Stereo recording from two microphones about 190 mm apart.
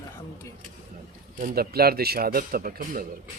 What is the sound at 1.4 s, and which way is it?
Speech, 50° right (ahead or behind).